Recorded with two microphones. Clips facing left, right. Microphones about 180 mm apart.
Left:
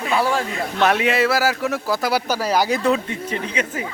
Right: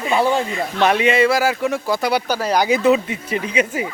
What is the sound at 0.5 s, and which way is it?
Speech, centre (ahead or behind).